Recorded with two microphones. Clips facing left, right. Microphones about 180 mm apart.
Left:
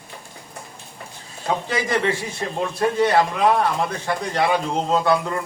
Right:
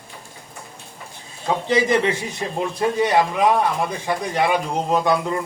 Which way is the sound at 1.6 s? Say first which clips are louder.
Right 5 dB; 20° right (ahead or behind).